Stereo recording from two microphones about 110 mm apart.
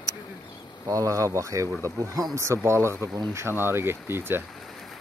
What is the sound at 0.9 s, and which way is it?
Speech, 30° right (ahead or behind).